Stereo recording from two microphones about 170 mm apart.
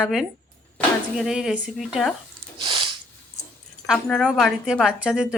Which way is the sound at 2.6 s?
30° right (ahead or behind).